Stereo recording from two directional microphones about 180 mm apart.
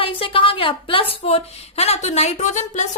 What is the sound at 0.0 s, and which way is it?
A woman's voice, 30° left (ahead or behind).